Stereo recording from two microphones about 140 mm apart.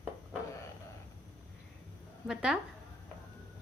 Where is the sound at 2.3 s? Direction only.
5° right (ahead or behind).